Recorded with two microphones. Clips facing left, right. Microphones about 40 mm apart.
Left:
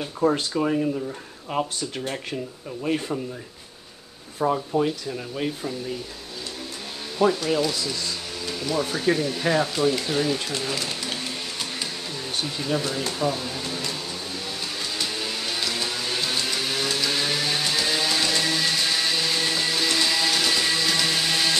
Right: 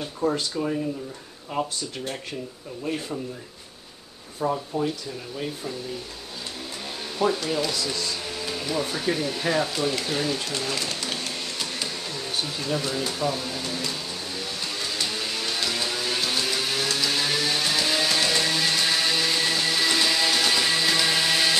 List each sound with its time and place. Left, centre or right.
0.0 s speech: centre
2.8 s speech: left
4.4 s speech: left
7.2 s speech: centre
11.8 s a sound: centre
14.8 s music: centre